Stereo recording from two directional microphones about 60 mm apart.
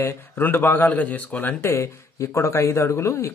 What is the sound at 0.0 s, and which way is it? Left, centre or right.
Speech, left.